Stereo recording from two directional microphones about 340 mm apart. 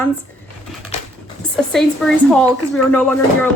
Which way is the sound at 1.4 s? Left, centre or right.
Centre.